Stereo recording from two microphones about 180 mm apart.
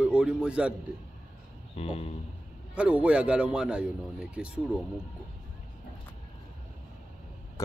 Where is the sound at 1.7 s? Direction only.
35° left (ahead or behind).